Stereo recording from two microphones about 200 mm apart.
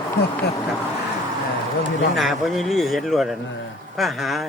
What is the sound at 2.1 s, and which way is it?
A man's voice, centre (ahead or behind).